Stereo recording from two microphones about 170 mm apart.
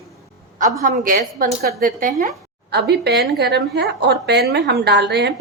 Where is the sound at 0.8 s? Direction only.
60° right (ahead or behind).